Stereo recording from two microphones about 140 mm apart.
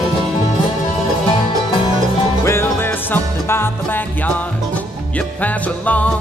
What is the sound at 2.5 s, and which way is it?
Music, 15° left (ahead or behind).